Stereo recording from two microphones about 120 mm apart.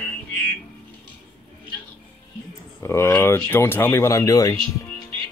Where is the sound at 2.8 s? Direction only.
20° left (ahead or behind).